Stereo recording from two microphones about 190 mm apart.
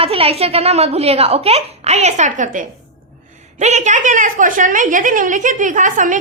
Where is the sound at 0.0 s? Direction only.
30° right (ahead or behind).